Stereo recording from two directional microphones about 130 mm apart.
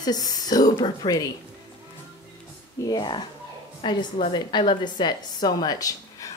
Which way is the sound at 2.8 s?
35° left (ahead or behind).